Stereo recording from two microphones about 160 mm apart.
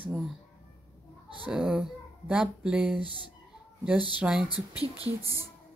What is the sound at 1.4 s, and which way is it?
Speech, 5° right (ahead or behind).